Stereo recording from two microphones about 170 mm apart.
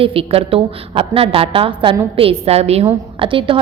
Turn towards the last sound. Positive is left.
turn(degrees=-30)  # may be behind; listen again after turning